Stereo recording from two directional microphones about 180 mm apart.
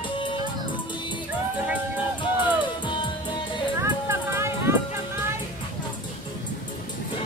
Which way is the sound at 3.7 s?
15° right (ahead or behind).